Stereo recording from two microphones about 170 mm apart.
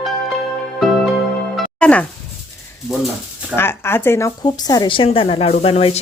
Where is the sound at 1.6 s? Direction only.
5° left (ahead or behind).